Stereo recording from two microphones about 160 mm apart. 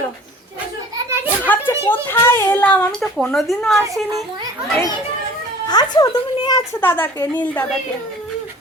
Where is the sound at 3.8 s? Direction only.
20° right (ahead or behind).